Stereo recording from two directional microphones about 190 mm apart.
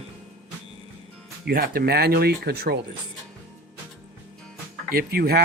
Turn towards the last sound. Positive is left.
turn(degrees=-55)  # may be behind; listen again after turning